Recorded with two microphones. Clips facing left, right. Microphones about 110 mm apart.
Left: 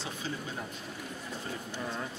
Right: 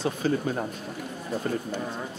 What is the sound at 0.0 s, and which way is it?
Speech, 55° right (ahead or behind).